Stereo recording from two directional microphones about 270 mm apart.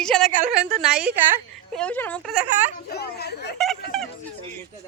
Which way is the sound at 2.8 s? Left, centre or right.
Left.